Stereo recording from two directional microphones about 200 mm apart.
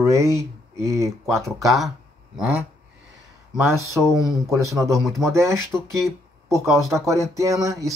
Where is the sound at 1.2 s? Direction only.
Centre (ahead or behind).